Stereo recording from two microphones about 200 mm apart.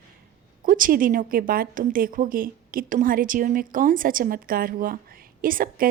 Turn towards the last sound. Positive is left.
turn(degrees=-45)  # may be behind; listen again after turning